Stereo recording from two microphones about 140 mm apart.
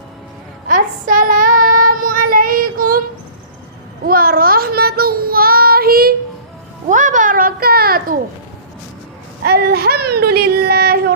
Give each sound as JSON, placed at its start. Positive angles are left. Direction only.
{"t": 0.7, "sound": "child singing", "side_deg": -75}
{"t": 4.0, "sound": "child singing", "side_deg": -90}
{"t": 6.8, "sound": "children playing", "side_deg": -65}
{"t": 9.5, "sound": "a sound", "side_deg": -90}